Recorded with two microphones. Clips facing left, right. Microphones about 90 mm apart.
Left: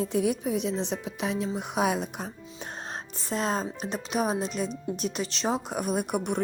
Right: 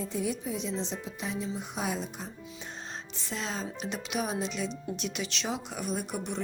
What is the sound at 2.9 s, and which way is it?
A woman's voice, 45° left (ahead or behind).